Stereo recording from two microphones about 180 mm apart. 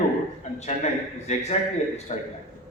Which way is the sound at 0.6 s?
40° left (ahead or behind).